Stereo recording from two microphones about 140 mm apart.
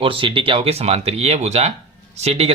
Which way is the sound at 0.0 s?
40° right (ahead or behind).